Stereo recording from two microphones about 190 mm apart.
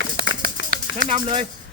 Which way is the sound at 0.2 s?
55° right (ahead or behind).